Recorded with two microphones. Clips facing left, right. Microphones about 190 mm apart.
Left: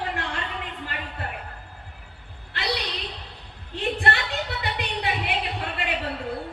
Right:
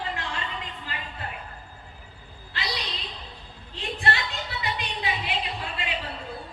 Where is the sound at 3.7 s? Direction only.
60° left (ahead or behind).